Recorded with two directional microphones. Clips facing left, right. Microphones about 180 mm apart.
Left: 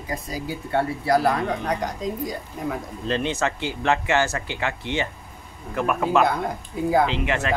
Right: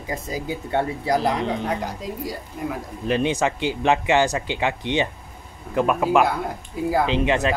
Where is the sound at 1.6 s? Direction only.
5° right (ahead or behind).